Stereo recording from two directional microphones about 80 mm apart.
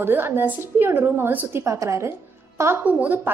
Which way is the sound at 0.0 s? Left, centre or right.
Right.